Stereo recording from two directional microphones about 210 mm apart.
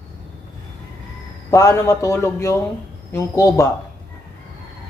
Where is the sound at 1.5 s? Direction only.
15° left (ahead or behind).